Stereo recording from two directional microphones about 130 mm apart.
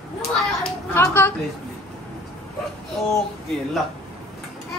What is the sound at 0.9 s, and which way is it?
Speech, 15° left (ahead or behind).